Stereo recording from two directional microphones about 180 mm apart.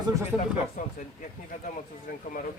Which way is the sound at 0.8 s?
45° left (ahead or behind).